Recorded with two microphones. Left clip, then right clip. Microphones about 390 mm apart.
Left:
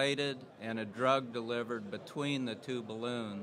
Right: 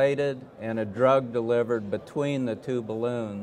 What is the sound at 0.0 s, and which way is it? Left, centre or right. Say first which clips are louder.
A man's voice: right 9 dB; right.